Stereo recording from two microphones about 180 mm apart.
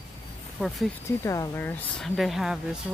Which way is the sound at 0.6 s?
5° left (ahead or behind).